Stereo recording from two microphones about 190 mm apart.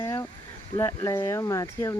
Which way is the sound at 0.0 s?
15° left (ahead or behind).